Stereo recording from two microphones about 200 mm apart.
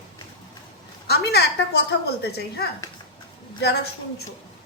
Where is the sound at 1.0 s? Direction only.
55° left (ahead or behind).